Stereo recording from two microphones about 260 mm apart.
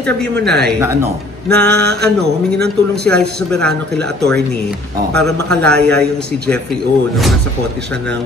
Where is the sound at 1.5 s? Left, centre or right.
Right.